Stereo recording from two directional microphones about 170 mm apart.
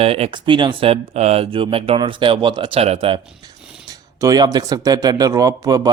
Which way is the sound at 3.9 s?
20° right (ahead or behind).